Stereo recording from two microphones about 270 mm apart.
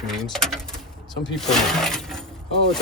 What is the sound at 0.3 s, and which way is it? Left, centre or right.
Speech, centre.